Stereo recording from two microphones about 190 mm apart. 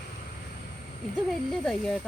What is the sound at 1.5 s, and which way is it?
Speech, centre (ahead or behind).